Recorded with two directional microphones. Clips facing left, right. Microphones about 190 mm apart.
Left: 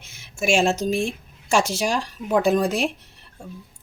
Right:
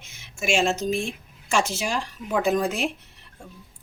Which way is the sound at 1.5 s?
35° left (ahead or behind).